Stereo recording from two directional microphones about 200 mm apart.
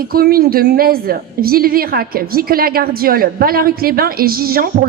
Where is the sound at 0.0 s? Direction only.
45° right (ahead or behind).